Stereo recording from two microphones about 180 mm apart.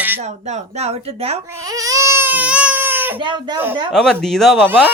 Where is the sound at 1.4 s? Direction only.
15° right (ahead or behind).